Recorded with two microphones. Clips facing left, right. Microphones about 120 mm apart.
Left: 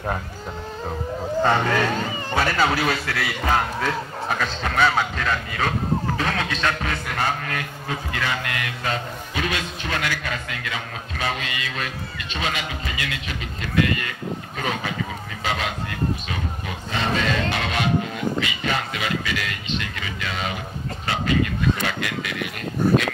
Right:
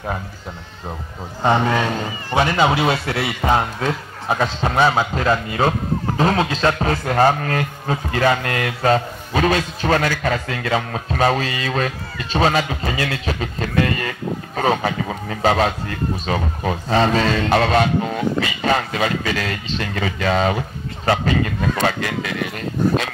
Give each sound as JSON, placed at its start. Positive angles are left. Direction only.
{"t": 1.4, "sound": "a man's voice", "side_deg": -20}